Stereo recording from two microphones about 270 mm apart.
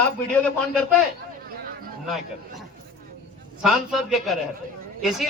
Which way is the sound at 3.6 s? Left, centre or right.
Centre.